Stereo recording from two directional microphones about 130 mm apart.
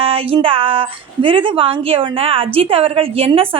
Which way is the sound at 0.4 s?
45° right (ahead or behind).